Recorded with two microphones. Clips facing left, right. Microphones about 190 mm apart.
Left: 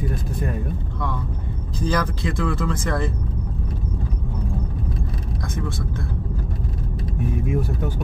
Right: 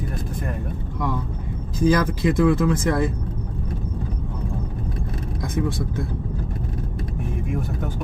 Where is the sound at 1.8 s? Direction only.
15° right (ahead or behind).